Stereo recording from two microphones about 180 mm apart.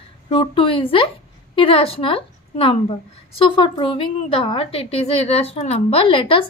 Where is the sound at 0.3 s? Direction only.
30° left (ahead or behind).